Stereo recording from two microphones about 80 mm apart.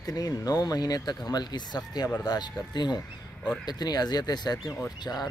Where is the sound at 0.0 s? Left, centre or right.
Left.